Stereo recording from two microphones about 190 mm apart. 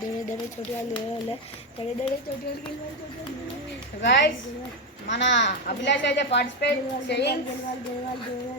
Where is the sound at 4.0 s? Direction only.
65° left (ahead or behind).